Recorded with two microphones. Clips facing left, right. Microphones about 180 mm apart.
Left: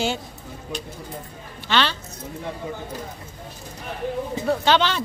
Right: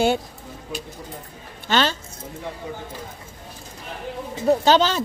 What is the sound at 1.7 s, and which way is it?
Speech, 45° right (ahead or behind).